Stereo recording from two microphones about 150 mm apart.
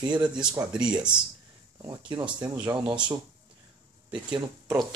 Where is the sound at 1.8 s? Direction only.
30° right (ahead or behind).